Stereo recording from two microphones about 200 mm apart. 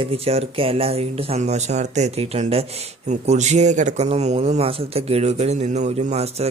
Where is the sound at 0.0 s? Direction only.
30° right (ahead or behind).